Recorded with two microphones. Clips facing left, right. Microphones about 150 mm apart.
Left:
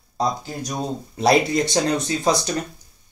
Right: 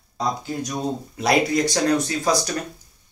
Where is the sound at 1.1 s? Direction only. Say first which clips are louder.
Left 2 dB; 30° left (ahead or behind).